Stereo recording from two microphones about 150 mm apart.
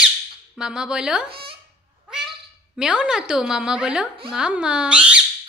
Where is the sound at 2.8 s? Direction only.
5° right (ahead or behind).